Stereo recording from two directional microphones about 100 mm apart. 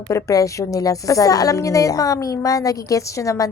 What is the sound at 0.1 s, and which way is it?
A woman's voice, 35° left (ahead or behind).